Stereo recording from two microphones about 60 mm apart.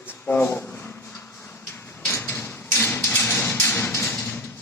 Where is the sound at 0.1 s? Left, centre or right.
Left.